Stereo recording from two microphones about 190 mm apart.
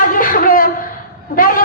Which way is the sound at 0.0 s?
45° left (ahead or behind).